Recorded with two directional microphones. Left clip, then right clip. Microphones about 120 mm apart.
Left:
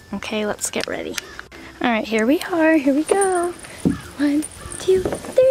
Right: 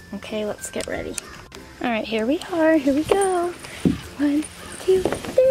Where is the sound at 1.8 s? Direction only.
40° left (ahead or behind).